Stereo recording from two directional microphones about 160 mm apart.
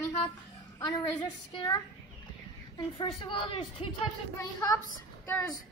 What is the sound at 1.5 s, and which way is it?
A child's voice, 25° left (ahead or behind).